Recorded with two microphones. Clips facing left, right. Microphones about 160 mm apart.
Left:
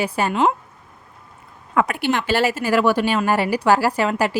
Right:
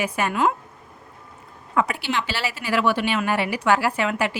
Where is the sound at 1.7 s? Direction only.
55° left (ahead or behind).